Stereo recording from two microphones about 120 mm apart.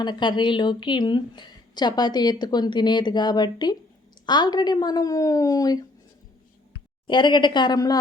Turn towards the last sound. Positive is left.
turn(degrees=35)  # may be behind; listen again after turning